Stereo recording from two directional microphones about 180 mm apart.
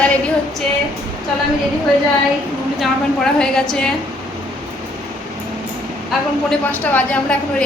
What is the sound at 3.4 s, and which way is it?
Speech, 5° left (ahead or behind).